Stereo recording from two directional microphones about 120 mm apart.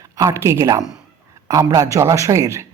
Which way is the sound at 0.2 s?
25° right (ahead or behind).